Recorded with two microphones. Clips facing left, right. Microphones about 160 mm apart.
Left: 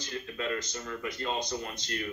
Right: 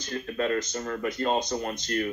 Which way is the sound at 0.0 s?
50° right (ahead or behind).